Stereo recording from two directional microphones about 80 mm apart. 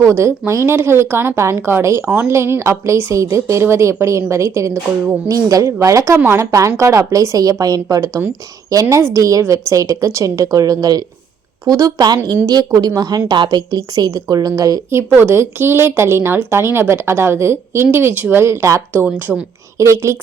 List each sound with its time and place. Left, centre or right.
0.2 s a woman's voice: right
5.3 s a woman's voice: right
14.8 s a woman's voice: right
19.0 s a woman's voice: centre
19.8 s a woman's voice: right